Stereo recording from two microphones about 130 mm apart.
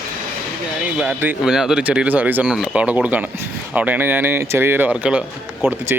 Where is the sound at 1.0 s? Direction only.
15° right (ahead or behind).